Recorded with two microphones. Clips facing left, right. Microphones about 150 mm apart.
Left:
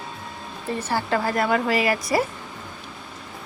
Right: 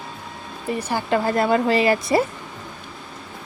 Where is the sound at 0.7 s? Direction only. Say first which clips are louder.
Right 2 dB; 15° right (ahead or behind).